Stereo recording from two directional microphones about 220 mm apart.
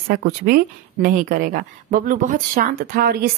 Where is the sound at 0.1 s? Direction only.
45° right (ahead or behind).